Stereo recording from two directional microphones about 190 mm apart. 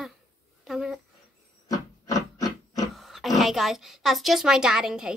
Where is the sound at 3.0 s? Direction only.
Centre (ahead or behind).